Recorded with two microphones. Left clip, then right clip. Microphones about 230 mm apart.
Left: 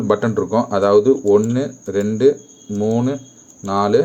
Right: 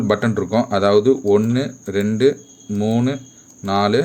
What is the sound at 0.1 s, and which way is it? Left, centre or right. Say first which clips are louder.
A man's voice: left 2 dB; right.